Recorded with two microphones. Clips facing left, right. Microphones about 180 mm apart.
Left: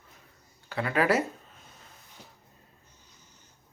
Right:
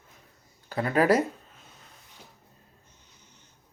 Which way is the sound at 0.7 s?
40° right (ahead or behind).